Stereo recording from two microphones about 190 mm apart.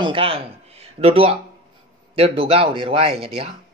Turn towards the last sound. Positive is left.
turn(degrees=-30)  # may be behind; listen again after turning